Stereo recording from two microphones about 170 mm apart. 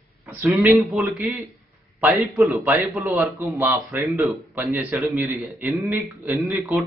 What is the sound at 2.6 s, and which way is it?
Speech, 15° right (ahead or behind).